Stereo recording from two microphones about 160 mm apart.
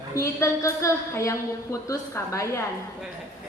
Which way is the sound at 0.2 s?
20° left (ahead or behind).